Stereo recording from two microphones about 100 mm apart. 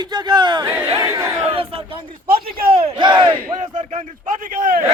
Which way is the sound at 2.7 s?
55° right (ahead or behind).